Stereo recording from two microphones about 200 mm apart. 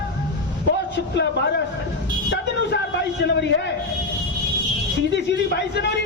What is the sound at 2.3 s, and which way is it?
A man's voice, 60° left (ahead or behind).